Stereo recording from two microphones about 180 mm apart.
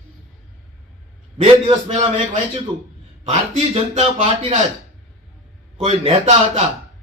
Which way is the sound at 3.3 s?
35° right (ahead or behind).